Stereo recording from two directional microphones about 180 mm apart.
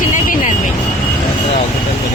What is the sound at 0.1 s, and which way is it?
Vehicle, 45° left (ahead or behind).